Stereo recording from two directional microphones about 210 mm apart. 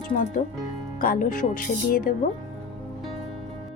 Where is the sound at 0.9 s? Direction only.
40° left (ahead or behind).